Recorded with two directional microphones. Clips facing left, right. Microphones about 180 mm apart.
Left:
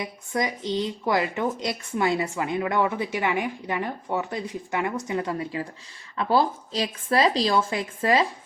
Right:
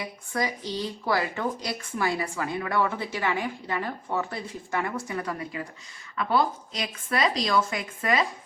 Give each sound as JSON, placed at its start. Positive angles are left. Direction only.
{"t": 0.0, "sound": "speech", "side_deg": 20}